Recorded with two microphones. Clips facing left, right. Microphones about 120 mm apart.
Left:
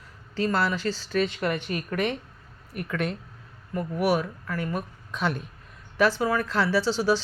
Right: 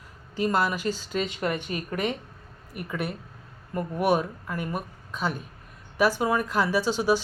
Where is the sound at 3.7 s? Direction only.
25° right (ahead or behind).